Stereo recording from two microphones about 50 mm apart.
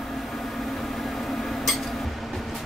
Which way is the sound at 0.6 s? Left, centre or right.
Centre.